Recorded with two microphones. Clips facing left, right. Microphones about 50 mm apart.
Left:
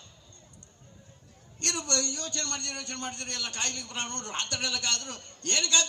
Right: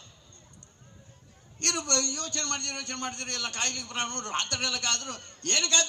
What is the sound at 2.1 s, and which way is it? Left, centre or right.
A man's voice, right.